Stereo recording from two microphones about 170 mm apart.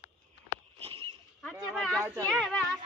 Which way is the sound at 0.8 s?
35° right (ahead or behind).